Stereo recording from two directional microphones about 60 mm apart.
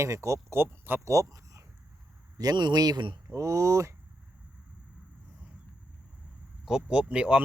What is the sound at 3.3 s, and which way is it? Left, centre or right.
Speech, right.